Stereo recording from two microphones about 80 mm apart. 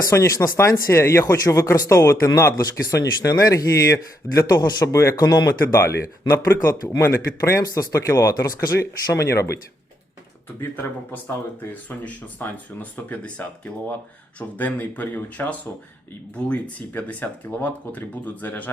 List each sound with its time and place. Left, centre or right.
0.1 s speech: left
2.6 s speech: left
4.4 s speech: left
5.7 s speech: left
7.6 s speech: left
7.9 s speech: left
10.8 s speech: left